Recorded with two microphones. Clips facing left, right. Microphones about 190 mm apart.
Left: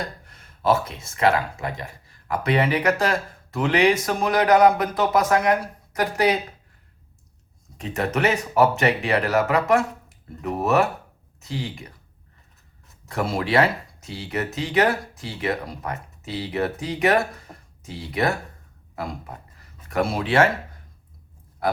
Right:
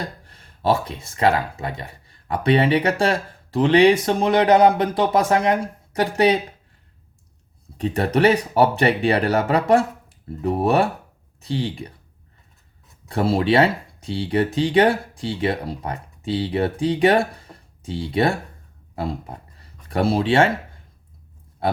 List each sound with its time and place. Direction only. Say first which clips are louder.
0.0 s speech: right 1 dB; 30° right (ahead or behind)
7.8 s speech: right 5 dB; 35° right (ahead or behind)
13.1 s speech: right 5 dB; 30° right (ahead or behind)